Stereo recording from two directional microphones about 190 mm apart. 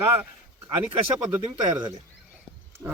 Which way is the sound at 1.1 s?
20° right (ahead or behind).